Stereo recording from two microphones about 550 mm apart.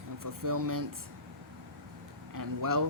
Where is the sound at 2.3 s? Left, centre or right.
Right.